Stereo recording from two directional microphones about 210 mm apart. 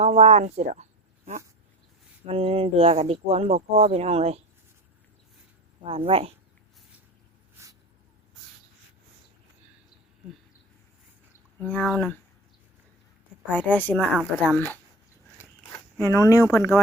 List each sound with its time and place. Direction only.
0.0 s speech: 30° right (ahead or behind)
2.2 s speech: 30° right (ahead or behind)
5.8 s speech: 25° right (ahead or behind)
7.6 s writing: 15° right (ahead or behind)
11.6 s speech: 5° left (ahead or behind)
13.5 s a woman's voice: 10° left (ahead or behind)
14.0 s speech: 10° right (ahead or behind)
14.4 s a woman's voice: 5° left (ahead or behind)
15.4 s zipper: 10° left (ahead or behind)